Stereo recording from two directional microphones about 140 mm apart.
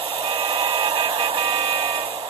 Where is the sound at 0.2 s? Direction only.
40° right (ahead or behind).